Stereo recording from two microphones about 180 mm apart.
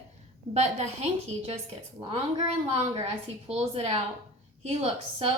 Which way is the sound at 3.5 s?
35° right (ahead or behind).